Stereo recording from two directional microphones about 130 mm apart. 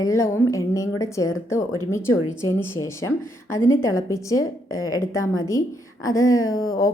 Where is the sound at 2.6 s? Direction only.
20° left (ahead or behind).